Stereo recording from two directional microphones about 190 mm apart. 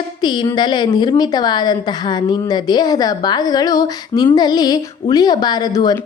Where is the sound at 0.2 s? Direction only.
25° left (ahead or behind).